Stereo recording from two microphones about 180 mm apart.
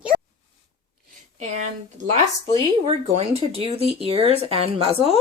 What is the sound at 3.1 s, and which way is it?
Speech, 35° right (ahead or behind).